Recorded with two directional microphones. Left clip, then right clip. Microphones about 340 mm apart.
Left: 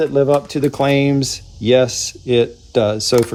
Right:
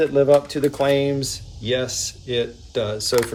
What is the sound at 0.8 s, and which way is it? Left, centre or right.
Speech, centre.